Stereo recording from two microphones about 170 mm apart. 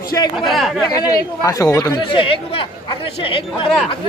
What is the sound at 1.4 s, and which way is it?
A man's voice, 20° left (ahead or behind).